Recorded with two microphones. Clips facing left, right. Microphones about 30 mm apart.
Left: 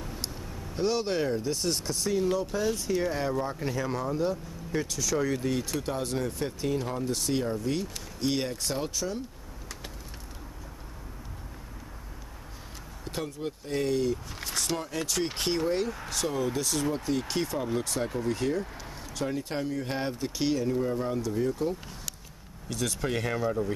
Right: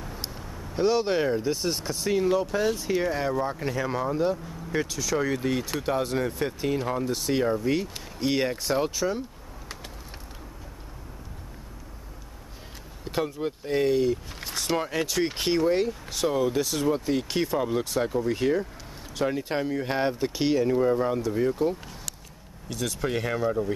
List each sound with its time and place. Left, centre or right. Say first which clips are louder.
0.0 s speech: right 1 dB; centre
13.0 s speech: right 6 dB; centre
15.1 s speech: right 4 dB; centre
22.7 s speech: right 2 dB; centre